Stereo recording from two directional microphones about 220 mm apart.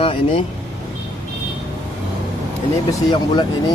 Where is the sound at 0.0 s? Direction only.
25° left (ahead or behind).